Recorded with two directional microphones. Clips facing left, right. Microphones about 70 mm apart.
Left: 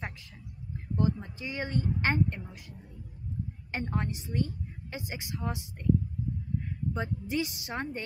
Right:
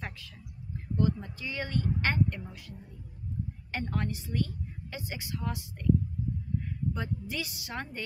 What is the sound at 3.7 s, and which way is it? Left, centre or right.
A woman's voice, left.